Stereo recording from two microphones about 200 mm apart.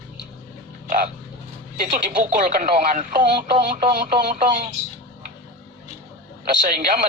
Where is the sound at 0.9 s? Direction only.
40° right (ahead or behind).